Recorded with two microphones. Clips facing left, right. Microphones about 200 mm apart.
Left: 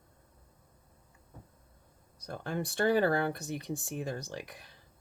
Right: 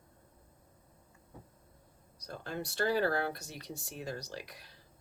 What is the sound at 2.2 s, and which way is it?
Speech, 50° left (ahead or behind).